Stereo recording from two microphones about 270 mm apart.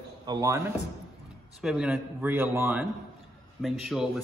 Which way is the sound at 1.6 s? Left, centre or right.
Centre.